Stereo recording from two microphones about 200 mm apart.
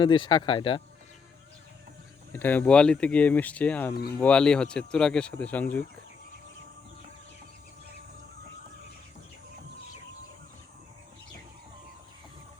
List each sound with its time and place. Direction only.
0.0 s speech: 25° left (ahead or behind)
2.3 s speech: 10° left (ahead or behind)